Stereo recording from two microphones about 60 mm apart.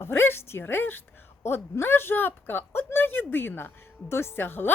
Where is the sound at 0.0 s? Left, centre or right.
Left.